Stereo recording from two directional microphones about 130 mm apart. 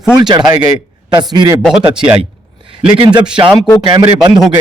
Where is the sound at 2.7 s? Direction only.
40° right (ahead or behind).